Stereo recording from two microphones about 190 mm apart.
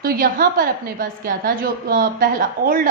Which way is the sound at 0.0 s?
50° right (ahead or behind).